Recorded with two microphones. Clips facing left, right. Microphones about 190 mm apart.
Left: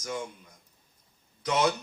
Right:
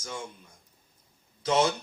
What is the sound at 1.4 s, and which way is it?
Chuckle, 30° right (ahead or behind).